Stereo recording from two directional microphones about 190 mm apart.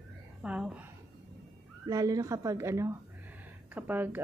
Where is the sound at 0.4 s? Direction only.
5° right (ahead or behind).